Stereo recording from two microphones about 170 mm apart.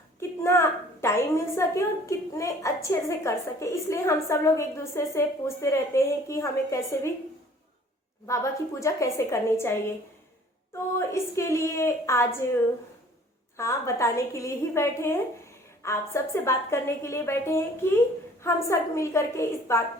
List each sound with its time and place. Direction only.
0.2 s a woman's voice: 15° left (ahead or behind)
8.3 s a woman's voice: 20° left (ahead or behind)
11.1 s a woman's voice: 15° left (ahead or behind)
13.6 s a woman's voice: 15° left (ahead or behind)